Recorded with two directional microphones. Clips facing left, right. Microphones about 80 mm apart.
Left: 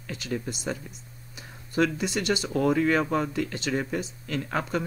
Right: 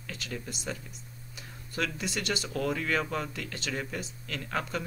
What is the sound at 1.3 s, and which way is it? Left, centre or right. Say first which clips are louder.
Speech: left 9 dB; centre.